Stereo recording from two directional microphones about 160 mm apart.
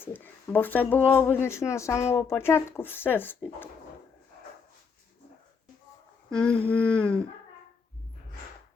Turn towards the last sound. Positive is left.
turn(degrees=5)  # may be behind; listen again after turning